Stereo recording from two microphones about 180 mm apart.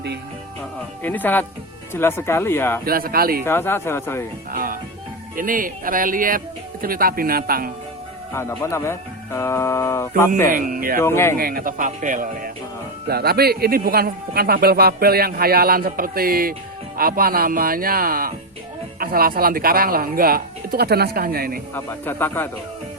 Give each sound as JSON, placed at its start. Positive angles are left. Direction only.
{"t": 1.0, "sound": "speech", "side_deg": 10}
{"t": 2.8, "sound": "a man's voice", "side_deg": -55}
{"t": 3.4, "sound": "speech", "side_deg": 10}
{"t": 4.5, "sound": "a man's voice", "side_deg": -50}
{"t": 8.3, "sound": "speech", "side_deg": 15}
{"t": 10.5, "sound": "speech", "side_deg": -50}
{"t": 11.0, "sound": "speech", "side_deg": 15}
{"t": 11.3, "sound": "speech", "side_deg": -55}
{"t": 13.1, "sound": "a man's voice", "side_deg": -60}
{"t": 21.8, "sound": "speech", "side_deg": 10}